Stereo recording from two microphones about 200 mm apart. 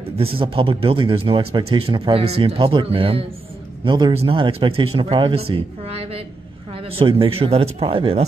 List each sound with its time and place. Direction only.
0.4 s speech: 25° right (ahead or behind)